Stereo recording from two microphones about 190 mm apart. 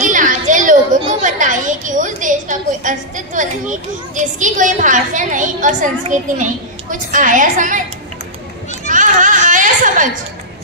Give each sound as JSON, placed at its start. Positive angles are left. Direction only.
{"t": 0.1, "sound": "children playing", "side_deg": -45}
{"t": 1.2, "sound": "a woman's voice", "side_deg": -40}
{"t": 8.8, "sound": "a sound", "side_deg": -40}